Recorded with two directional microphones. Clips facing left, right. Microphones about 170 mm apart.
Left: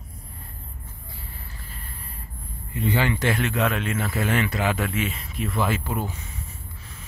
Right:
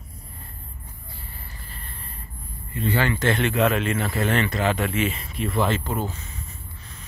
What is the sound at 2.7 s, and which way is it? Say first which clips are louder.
Speech: even; 15° left (ahead or behind).